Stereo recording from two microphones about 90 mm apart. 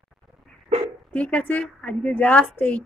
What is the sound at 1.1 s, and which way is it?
A woman's voice, 15° left (ahead or behind).